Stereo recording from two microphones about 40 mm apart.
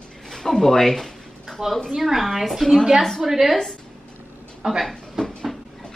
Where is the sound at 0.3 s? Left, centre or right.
Centre.